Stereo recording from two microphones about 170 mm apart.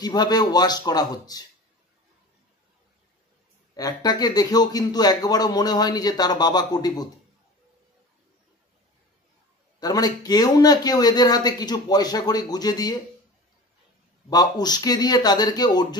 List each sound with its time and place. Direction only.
0.0 s speech: 25° left (ahead or behind)
3.7 s speech: 20° left (ahead or behind)
9.8 s speech: 20° left (ahead or behind)
14.3 s speech: 25° left (ahead or behind)